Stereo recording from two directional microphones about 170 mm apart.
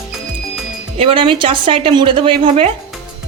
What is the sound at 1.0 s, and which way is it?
A woman's voice, 30° right (ahead or behind).